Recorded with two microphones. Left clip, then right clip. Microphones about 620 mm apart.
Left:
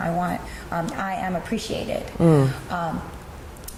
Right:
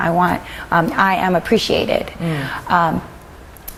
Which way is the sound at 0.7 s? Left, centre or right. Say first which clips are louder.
Right 12 dB; right.